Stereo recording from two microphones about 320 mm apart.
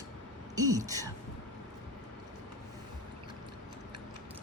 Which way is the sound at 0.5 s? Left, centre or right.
Centre.